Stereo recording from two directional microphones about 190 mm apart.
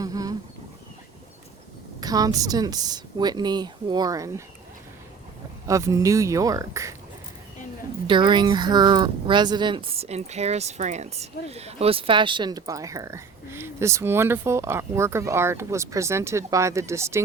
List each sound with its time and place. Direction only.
0.0 s a sound: 20° right (ahead or behind)
2.0 s speech: 20° right (ahead or behind)
5.6 s speech: 15° right (ahead or behind)
8.0 s speech: 25° right (ahead or behind)